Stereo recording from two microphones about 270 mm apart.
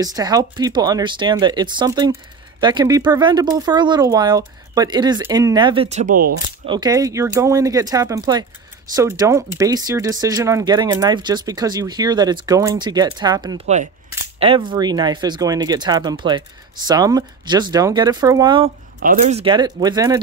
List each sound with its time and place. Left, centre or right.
0.0 s speech: centre; by 6.3 s right
6.6 s speech: centre
18.9 s speech: right